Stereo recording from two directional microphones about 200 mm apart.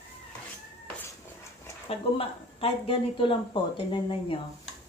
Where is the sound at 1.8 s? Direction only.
30° left (ahead or behind).